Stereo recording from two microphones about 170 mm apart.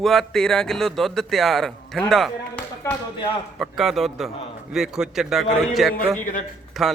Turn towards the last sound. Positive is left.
turn(degrees=0)  # may be behind; listen again after turning